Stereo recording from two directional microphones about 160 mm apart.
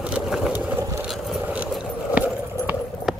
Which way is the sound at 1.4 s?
10° right (ahead or behind).